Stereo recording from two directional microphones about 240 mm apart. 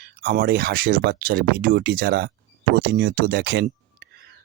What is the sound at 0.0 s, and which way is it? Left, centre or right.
Speech, right.